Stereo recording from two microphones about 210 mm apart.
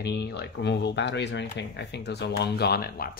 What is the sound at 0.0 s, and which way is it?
Speech, 50° left (ahead or behind).